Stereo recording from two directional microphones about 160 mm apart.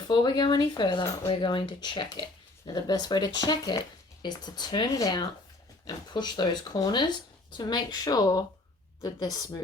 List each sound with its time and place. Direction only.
0.1 s speech: 25° left (ahead or behind)